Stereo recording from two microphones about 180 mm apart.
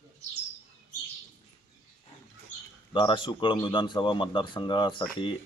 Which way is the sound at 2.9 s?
25° left (ahead or behind).